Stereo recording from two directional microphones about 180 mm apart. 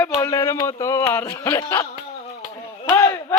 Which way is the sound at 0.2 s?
15° left (ahead or behind).